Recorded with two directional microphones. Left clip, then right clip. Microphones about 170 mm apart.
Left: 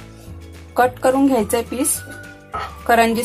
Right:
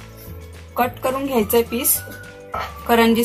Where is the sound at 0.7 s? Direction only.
55° left (ahead or behind).